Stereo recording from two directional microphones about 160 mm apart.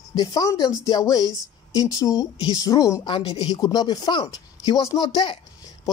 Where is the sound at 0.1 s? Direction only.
25° left (ahead or behind).